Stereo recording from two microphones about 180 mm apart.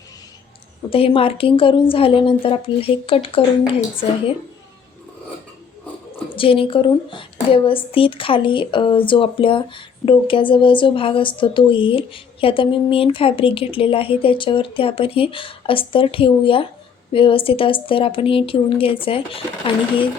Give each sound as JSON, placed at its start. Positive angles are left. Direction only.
{"t": 0.9, "sound": "a woman's voice", "side_deg": 30}
{"t": 6.3, "sound": "a woman's voice", "side_deg": 30}